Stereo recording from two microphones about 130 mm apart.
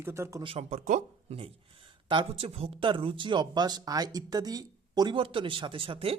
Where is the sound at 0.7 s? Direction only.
80° right.